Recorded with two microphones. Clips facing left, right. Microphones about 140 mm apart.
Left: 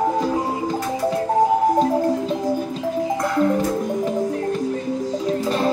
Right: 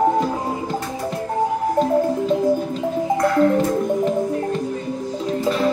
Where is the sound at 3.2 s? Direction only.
15° left (ahead or behind).